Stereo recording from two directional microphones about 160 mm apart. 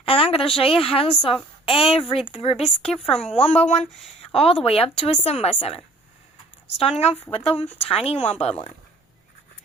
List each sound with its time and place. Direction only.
0.0 s a sound: 35° left (ahead or behind)
0.6 s a woman's voice: 35° left (ahead or behind)
2.6 s speech: 5° left (ahead or behind)
3.2 s a woman's voice: 45° left (ahead or behind)